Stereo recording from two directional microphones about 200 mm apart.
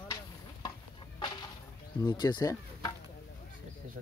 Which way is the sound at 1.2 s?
20° left (ahead or behind).